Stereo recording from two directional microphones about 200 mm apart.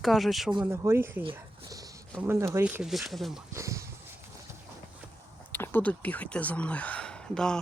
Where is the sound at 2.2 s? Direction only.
10° right (ahead or behind).